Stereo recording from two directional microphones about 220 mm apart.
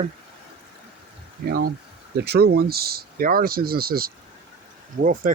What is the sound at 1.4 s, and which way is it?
Speech, 45° right (ahead or behind).